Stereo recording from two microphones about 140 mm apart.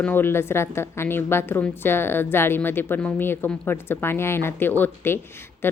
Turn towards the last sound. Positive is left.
turn(degrees=15)  # may be behind; listen again after turning